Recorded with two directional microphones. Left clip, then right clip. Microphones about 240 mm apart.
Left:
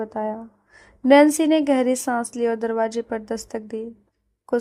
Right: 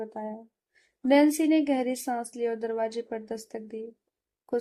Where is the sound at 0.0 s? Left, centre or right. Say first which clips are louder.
Left 9 dB; left.